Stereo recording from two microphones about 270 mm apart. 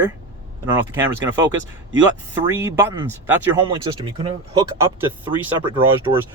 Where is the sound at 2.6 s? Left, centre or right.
Centre.